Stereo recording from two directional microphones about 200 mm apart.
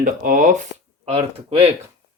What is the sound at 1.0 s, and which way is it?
Speech, 30° right (ahead or behind).